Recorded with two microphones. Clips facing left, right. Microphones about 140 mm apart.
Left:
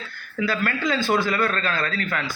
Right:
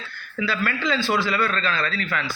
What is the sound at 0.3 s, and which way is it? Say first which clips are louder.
Speech: left 1 dB; 50° left (ahead or behind).